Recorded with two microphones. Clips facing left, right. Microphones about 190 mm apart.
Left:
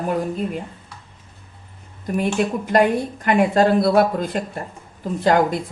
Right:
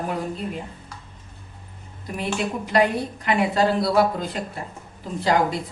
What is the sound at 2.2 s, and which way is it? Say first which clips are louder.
A woman's voice: left 5 dB; 50° left (ahead or behind).